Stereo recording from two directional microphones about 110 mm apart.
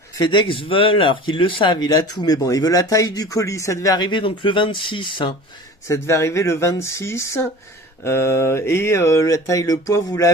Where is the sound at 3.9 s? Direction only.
50° left (ahead or behind).